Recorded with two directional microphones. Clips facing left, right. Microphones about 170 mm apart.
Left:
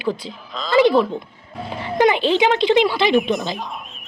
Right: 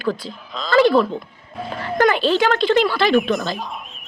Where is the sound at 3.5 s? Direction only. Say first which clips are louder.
Even; centre (ahead or behind).